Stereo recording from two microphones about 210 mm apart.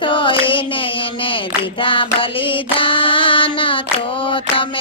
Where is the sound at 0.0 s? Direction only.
25° left (ahead or behind).